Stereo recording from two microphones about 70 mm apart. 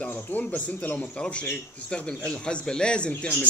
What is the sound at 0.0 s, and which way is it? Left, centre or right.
A man's voice, left.